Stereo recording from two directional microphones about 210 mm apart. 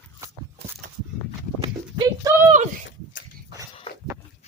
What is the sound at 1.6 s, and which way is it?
Clip-clop, 20° right (ahead or behind).